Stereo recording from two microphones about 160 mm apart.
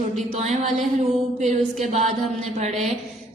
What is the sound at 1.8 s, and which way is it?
Speech, 45° right (ahead or behind).